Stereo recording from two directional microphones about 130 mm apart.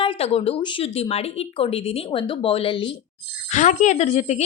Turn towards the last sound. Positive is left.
turn(degrees=60)  # may be behind; listen again after turning